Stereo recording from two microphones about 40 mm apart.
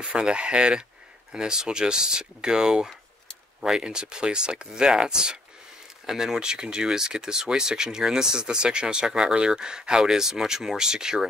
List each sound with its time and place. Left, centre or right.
0.0 s speech: right